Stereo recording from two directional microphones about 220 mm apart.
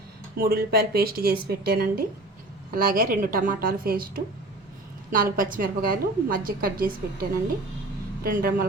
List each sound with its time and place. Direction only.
0.3 s a woman's voice: 45° right (ahead or behind)